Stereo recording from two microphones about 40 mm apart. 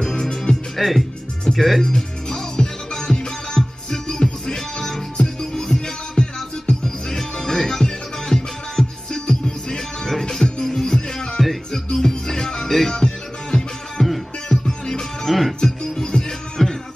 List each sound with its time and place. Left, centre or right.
0.0 s music: centre
0.7 s speech: centre
1.8 s music: centre
15.2 s music: centre
15.6 s music: centre